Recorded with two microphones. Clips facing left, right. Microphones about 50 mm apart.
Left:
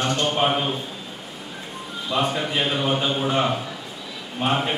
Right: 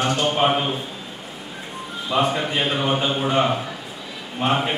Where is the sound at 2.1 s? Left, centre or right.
Centre.